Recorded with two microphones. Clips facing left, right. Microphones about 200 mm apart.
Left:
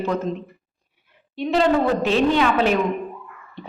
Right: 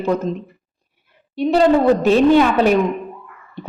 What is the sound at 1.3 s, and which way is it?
Speech, 40° right (ahead or behind).